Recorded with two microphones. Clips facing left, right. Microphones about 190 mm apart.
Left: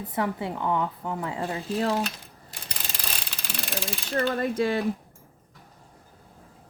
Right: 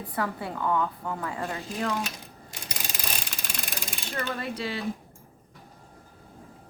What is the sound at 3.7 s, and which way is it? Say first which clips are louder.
Speech: left 9 dB; 35° left (ahead or behind).